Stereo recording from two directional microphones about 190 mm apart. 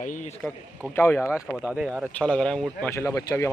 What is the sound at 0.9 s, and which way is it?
Speech, 15° left (ahead or behind).